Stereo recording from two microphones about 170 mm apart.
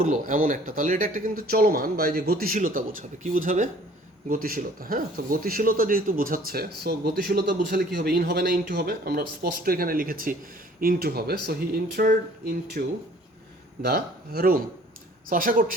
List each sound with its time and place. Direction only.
0.0 s speech: 50° right (ahead or behind); by 12.8 s 65° right (ahead or behind)
13.8 s speech: 65° right (ahead or behind)